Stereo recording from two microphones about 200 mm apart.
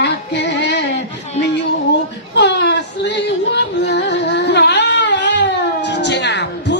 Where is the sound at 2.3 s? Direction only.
60° left (ahead or behind).